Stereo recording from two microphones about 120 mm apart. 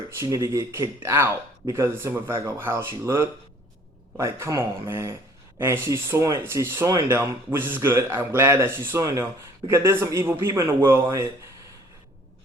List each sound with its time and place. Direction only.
0.1 s speech: 25° right (ahead or behind)